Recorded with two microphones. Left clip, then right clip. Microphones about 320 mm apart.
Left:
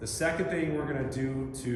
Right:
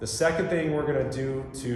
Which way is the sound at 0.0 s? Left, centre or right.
Centre.